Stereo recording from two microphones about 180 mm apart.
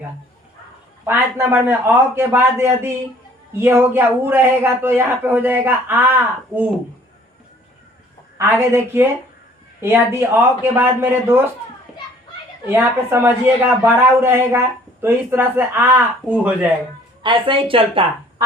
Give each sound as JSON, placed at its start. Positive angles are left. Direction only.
{"t": 1.0, "sound": "speech", "side_deg": -15}
{"t": 8.4, "sound": "speech", "side_deg": -15}
{"t": 12.6, "sound": "speech", "side_deg": -15}
{"t": 17.2, "sound": "speech", "side_deg": -30}